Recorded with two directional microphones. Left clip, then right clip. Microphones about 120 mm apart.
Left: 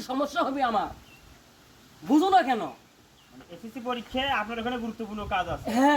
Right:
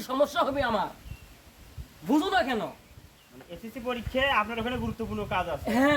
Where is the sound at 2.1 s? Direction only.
15° right (ahead or behind).